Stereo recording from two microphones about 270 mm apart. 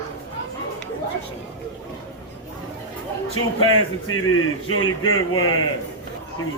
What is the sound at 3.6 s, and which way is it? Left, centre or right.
Speech, left.